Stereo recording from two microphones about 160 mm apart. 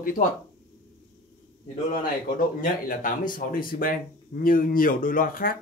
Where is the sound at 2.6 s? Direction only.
55° left (ahead or behind).